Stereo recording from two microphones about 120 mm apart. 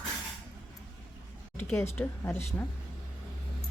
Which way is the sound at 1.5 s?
20° left (ahead or behind).